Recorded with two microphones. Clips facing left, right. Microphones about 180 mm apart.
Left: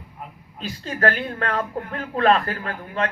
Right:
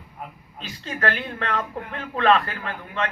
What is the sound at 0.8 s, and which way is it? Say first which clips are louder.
Speech: left 4 dB; 40° left (ahead or behind).